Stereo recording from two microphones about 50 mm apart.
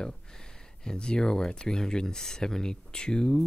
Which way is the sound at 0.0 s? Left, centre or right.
Centre.